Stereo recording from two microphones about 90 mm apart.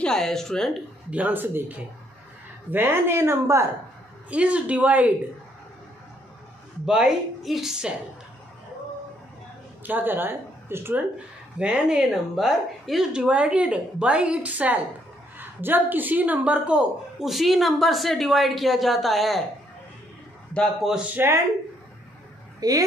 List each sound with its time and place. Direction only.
0.0 s a woman's voice: 5° left (ahead or behind)
1.1 s a woman's voice: 20° right (ahead or behind)
4.3 s a woman's voice: 15° right (ahead or behind)
6.9 s a woman's voice: 5° right (ahead or behind)
9.8 s a woman's voice: 20° right (ahead or behind)
11.5 s a woman's voice: 10° right (ahead or behind)
20.8 s a woman's voice: 10° right (ahead or behind)
22.6 s speech: 45° right (ahead or behind)